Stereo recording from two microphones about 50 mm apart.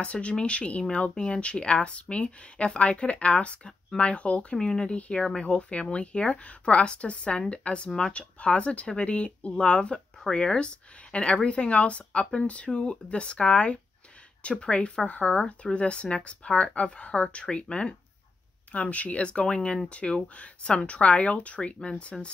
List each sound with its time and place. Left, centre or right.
0.0 s speech: left